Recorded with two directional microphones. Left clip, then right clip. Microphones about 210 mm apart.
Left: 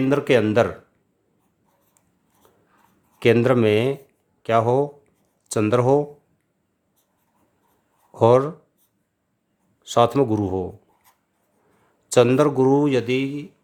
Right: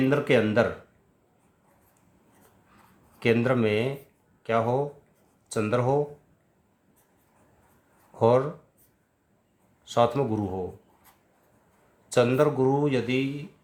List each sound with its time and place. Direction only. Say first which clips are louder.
0.1 s speech: left 8 dB; 50° left (ahead or behind)
3.2 s speech: left 7 dB; 50° left (ahead or behind)
8.1 s speech: left 6 dB; 50° left (ahead or behind)
9.8 s speech: left 6 dB; 50° left (ahead or behind)
12.0 s speech: left 6 dB; 50° left (ahead or behind)